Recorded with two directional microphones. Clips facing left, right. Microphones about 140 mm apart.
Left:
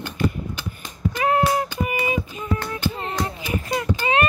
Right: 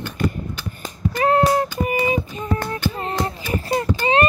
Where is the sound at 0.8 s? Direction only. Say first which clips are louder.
Right 3 dB; 40° right (ahead or behind).